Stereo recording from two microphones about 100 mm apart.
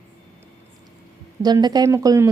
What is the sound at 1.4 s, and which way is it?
Speech, 40° right (ahead or behind).